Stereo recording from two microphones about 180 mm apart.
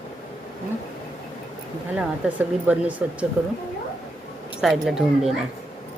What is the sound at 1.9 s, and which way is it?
Speech, 5° right (ahead or behind).